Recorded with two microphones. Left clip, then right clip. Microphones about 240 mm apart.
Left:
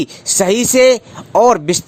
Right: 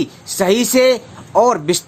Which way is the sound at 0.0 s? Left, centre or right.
Left.